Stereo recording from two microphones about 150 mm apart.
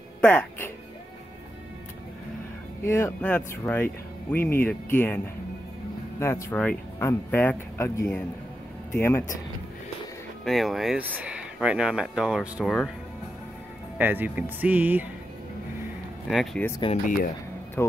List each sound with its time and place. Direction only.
0.2 s speech: 10° left (ahead or behind)
2.8 s speech: 15° left (ahead or behind)
10.4 s speech: centre (ahead or behind)
13.9 s speech: 10° right (ahead or behind)
16.3 s speech: centre (ahead or behind)
17.0 s speech: 65° left (ahead or behind)
17.8 s speech: 15° left (ahead or behind)